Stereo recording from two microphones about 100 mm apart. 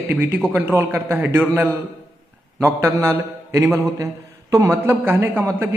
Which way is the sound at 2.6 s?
30° right (ahead or behind).